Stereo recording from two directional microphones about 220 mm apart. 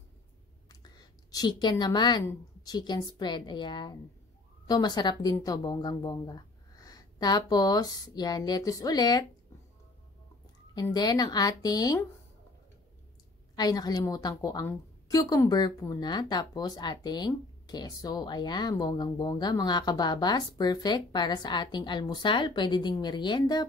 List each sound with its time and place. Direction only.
0.7 s a woman's voice: 20° left (ahead or behind)
10.7 s speech: 20° left (ahead or behind)
13.6 s a woman's voice: 15° left (ahead or behind)